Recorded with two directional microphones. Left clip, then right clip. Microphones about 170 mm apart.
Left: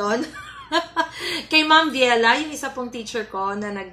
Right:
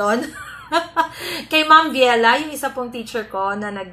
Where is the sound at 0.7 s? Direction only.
10° left (ahead or behind).